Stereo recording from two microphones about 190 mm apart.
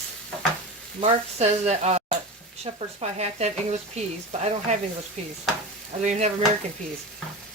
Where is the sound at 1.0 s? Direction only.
35° right (ahead or behind).